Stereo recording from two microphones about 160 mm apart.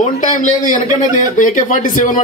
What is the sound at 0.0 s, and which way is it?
A man's voice, 50° left (ahead or behind).